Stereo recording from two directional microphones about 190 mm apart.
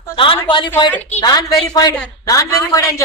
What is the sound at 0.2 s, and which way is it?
A woman's voice, 25° left (ahead or behind).